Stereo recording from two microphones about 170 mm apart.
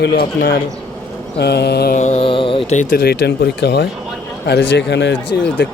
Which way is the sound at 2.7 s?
45° left (ahead or behind).